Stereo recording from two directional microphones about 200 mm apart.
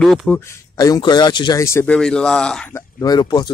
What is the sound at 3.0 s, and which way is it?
Speech, 20° left (ahead or behind).